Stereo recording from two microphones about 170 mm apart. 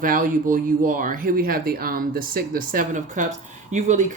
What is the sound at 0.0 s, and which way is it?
Speech, 55° right (ahead or behind).